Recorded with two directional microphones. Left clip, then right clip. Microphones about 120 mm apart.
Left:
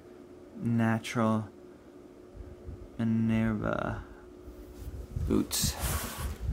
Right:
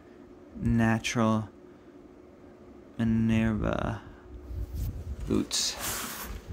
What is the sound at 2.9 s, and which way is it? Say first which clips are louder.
Speech: right 2 dB; 15° right (ahead or behind).